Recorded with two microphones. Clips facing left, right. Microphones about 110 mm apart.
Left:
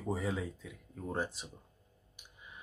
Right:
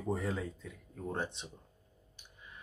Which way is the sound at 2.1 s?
15° left (ahead or behind).